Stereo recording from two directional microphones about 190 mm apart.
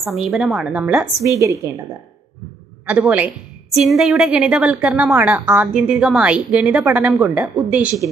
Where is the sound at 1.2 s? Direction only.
15° right (ahead or behind).